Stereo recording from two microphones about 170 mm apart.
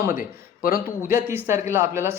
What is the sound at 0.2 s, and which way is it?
Speech, 60° left (ahead or behind).